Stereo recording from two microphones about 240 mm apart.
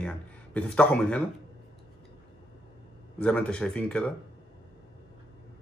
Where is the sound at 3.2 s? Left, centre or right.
Centre.